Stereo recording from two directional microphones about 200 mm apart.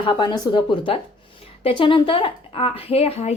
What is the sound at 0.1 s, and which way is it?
A woman's voice, 20° left (ahead or behind).